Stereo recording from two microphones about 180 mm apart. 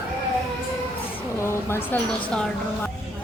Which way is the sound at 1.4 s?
15° left (ahead or behind).